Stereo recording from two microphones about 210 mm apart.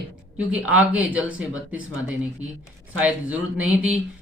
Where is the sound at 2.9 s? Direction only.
5° right (ahead or behind).